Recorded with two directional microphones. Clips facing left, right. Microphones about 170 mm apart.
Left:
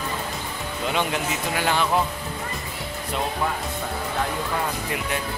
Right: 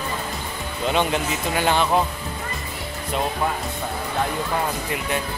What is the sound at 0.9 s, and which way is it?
Speech, 25° right (ahead or behind).